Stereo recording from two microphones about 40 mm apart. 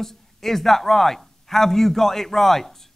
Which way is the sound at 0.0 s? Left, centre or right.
Centre.